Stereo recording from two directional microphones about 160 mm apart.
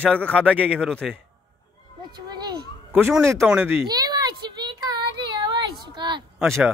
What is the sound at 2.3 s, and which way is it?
Children playing, 25° right (ahead or behind).